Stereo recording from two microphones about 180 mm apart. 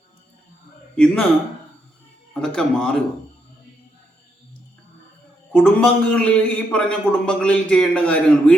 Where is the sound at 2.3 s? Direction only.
5° left (ahead or behind).